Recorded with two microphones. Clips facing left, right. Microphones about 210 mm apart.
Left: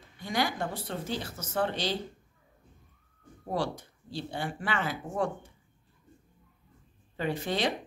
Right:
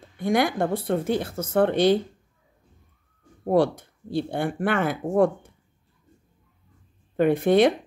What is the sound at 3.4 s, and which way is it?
Speech, 55° right (ahead or behind).